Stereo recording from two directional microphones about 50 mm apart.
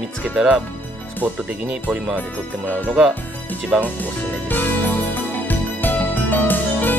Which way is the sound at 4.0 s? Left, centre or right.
Left.